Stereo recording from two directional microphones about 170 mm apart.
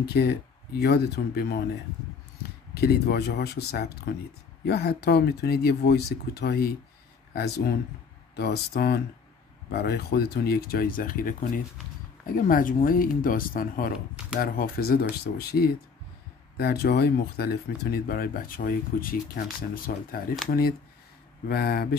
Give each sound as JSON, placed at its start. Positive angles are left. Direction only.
{"t": 0.0, "sound": "speech", "side_deg": 70}
{"t": 2.7, "sound": "speech", "side_deg": 65}
{"t": 8.4, "sound": "speech", "side_deg": 65}
{"t": 21.5, "sound": "speech", "side_deg": 65}